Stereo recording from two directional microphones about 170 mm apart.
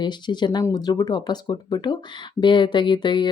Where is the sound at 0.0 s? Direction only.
25° left (ahead or behind).